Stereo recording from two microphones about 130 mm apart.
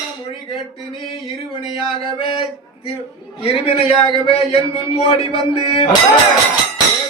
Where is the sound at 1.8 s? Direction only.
45° left (ahead or behind).